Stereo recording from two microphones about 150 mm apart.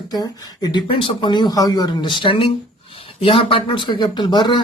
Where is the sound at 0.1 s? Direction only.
25° left (ahead or behind).